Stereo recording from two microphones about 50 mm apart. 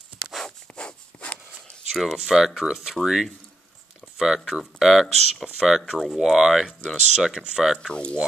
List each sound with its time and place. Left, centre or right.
0.7 s rub: left
1.9 s speech: centre
7.9 s speech: left